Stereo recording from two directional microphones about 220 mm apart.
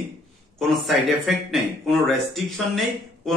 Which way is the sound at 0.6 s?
Centre (ahead or behind).